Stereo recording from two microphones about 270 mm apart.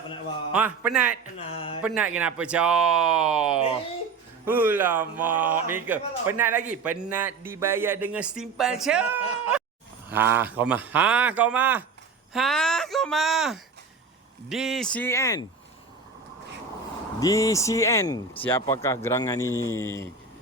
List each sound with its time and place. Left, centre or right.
0.5 s speech: centre
1.4 s speech: centre
1.8 s speech: centre
17.2 s speech: centre